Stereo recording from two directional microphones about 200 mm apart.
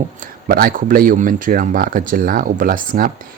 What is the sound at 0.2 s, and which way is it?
A man's voice, 45° right (ahead or behind).